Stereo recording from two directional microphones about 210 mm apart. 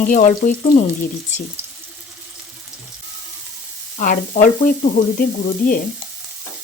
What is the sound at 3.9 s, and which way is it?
A woman's voice, 40° left (ahead or behind).